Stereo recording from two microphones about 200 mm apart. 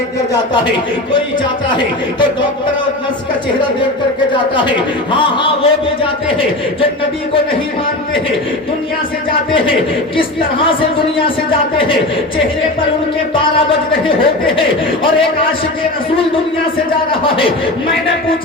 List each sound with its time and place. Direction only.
4.3 s a man's voice: 25° left (ahead or behind)
14.2 s a man's voice: 25° left (ahead or behind)
17.1 s a man's voice: 25° left (ahead or behind)